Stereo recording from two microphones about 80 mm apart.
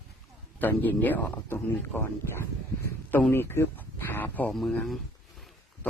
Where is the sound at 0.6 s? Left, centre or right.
Left.